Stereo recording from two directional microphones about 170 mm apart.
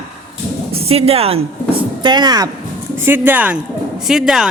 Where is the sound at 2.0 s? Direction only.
25° right (ahead or behind).